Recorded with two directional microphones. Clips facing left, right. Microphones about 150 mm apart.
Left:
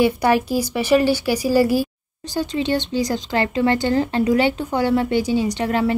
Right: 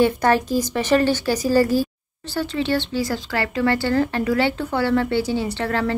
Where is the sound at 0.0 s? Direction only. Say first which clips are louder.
Left 1 dB; 10° left (ahead or behind).